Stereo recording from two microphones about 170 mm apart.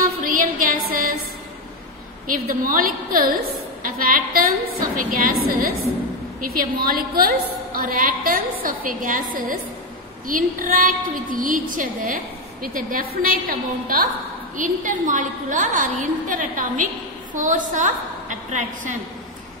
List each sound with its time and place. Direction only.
0.2 s music: 55° right (ahead or behind)
2.2 s a woman's voice: 55° right (ahead or behind)